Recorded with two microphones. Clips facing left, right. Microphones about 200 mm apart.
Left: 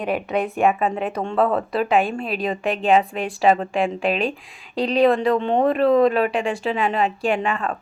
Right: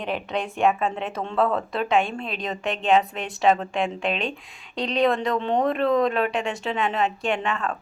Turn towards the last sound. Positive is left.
turn(degrees=10)  # may be behind; listen again after turning